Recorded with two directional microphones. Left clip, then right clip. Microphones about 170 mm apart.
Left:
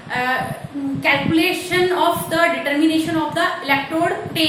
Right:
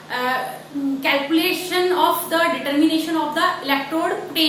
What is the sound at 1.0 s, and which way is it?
A woman's voice, 15° left (ahead or behind).